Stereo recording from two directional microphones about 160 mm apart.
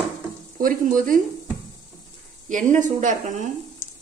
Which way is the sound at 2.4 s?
50° right (ahead or behind).